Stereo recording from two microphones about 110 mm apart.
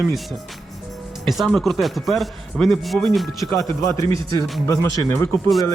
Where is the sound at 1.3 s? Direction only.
Centre (ahead or behind).